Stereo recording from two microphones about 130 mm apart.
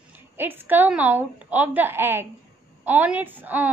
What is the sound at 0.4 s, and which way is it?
A woman's voice, 15° right (ahead or behind).